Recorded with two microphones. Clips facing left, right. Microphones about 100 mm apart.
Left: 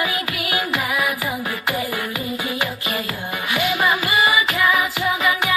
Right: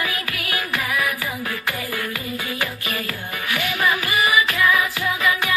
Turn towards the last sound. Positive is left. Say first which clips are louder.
# left 2 dB
turn(degrees=20)  # may be behind; listen again after turning